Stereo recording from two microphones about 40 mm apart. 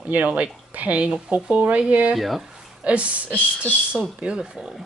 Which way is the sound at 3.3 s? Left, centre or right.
Left.